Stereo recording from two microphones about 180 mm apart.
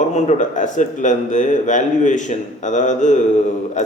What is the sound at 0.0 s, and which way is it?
A man's voice, 40° left (ahead or behind).